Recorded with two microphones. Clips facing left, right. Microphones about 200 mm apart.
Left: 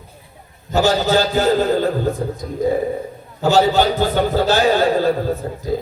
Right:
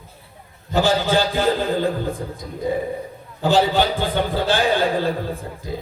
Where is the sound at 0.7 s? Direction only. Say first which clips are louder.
Left 2 dB; 45° left (ahead or behind).